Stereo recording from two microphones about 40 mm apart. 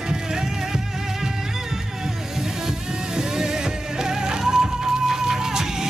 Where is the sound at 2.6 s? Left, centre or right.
Centre.